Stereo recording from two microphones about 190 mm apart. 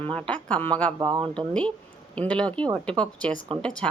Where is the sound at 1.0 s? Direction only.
20° right (ahead or behind).